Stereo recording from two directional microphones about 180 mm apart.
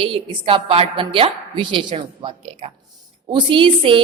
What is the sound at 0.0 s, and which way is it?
A woman's voice, 30° right (ahead or behind).